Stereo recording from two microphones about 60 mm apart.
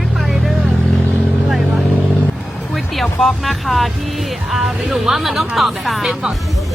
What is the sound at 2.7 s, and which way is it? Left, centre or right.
Speech, centre.